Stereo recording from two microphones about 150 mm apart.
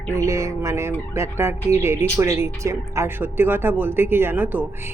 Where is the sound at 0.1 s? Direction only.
20° right (ahead or behind).